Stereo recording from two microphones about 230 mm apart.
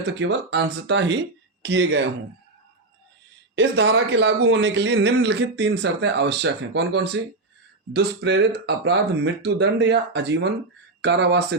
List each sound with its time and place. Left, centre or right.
0.1 s speech: right
3.5 s speech: right